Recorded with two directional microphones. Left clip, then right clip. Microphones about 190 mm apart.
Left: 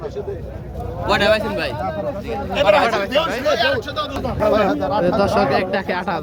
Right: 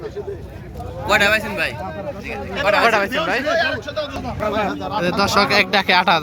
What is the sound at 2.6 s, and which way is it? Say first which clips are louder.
Speech: left 2 dB; centre (ahead or behind).